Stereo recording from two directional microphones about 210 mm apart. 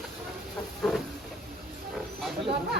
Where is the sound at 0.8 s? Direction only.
Centre (ahead or behind).